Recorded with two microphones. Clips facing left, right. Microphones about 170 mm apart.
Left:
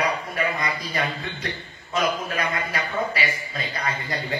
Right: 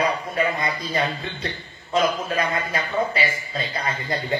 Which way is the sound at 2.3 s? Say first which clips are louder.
Right 3 dB; 25° right (ahead or behind).